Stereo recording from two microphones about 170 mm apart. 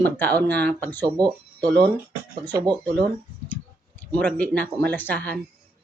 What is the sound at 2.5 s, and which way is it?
Speech, 25° right (ahead or behind).